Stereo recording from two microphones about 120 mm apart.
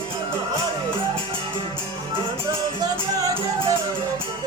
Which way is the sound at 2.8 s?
30° right (ahead or behind).